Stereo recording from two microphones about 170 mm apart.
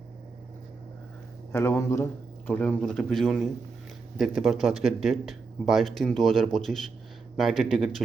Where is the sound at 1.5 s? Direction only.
15° left (ahead or behind).